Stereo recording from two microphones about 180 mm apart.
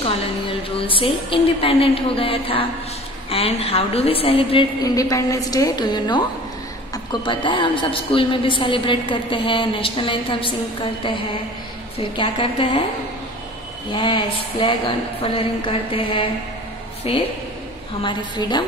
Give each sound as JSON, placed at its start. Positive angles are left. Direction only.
{"t": 0.7, "sound": "a woman's voice", "side_deg": 30}
{"t": 12.0, "sound": "a woman's voice", "side_deg": 30}
{"t": 13.9, "sound": "a woman's voice", "side_deg": 30}
{"t": 18.4, "sound": "a woman's voice", "side_deg": 25}